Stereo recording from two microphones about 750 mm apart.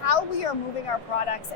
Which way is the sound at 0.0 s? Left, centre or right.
Left.